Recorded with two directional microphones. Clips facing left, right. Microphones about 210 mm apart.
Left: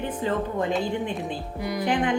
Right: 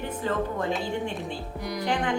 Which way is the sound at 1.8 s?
15° left (ahead or behind).